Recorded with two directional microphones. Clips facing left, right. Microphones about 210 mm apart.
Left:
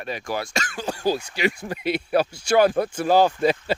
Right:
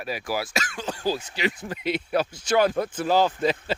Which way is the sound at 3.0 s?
45° left (ahead or behind).